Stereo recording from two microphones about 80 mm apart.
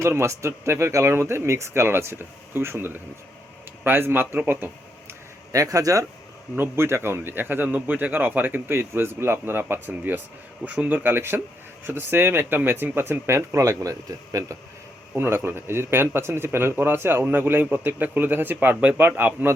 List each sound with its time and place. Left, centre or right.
0.0 s speech: right
5.5 s speech: right
6.6 s a man's voice: right
15.1 s a man's voice: right